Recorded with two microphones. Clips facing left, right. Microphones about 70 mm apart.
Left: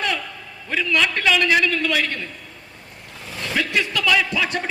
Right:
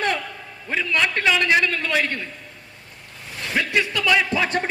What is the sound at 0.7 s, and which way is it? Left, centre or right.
A man's voice, right.